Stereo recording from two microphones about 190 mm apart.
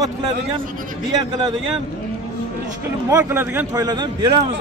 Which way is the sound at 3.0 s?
15° right (ahead or behind).